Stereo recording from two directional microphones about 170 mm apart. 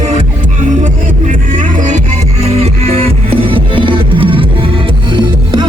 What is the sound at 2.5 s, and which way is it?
Music, 35° right (ahead or behind).